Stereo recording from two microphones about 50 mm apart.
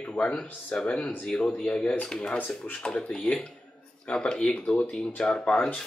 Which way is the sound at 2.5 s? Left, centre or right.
Left.